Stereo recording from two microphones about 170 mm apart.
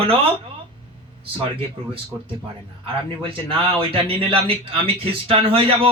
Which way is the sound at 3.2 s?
30° right (ahead or behind).